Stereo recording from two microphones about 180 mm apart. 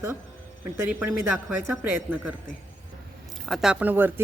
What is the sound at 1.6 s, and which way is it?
Speech, 10° right (ahead or behind).